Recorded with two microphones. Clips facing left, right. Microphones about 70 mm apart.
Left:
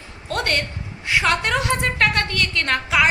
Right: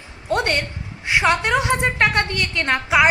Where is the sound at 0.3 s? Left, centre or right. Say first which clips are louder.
Right 3 dB; centre.